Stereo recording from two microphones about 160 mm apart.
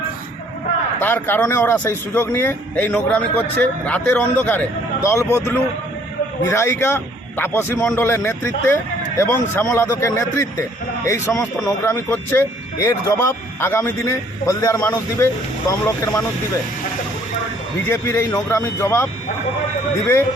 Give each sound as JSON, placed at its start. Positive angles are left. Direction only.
{"t": 0.9, "sound": "a man's voice", "side_deg": 15}
{"t": 17.8, "sound": "a man's voice", "side_deg": 15}